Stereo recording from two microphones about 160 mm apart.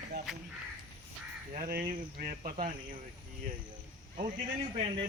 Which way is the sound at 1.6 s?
75° right (ahead or behind).